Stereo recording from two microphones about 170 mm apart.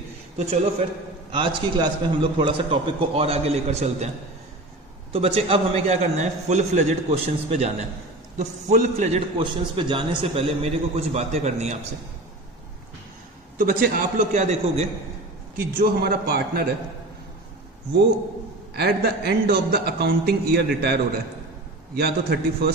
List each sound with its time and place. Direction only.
1.3 s a man's voice: 30° right (ahead or behind)
5.1 s a man's voice: 35° right (ahead or behind)
13.6 s a man's voice: 60° right (ahead or behind); by 14.9 s 40° right (ahead or behind)
15.5 s a man's voice: 60° right (ahead or behind)
18.7 s a man's voice: 70° right (ahead or behind)